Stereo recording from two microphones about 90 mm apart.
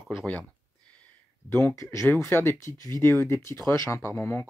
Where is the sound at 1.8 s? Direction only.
25° left (ahead or behind).